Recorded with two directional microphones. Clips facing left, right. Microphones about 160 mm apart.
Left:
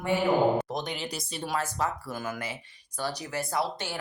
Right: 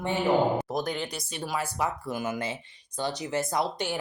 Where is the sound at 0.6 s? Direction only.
5° right (ahead or behind).